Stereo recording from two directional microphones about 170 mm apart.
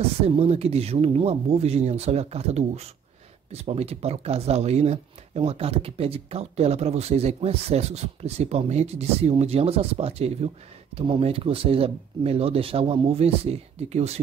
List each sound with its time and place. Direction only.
0.2 s speech: 35° right (ahead or behind)